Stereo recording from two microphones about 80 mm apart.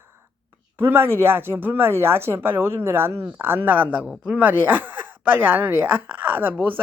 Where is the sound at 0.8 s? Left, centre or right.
Right.